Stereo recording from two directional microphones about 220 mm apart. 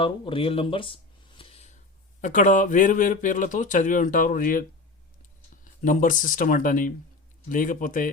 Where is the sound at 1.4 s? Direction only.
30° left (ahead or behind).